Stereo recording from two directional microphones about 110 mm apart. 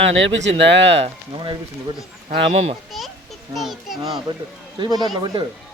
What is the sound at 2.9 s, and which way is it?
Speech, centre (ahead or behind).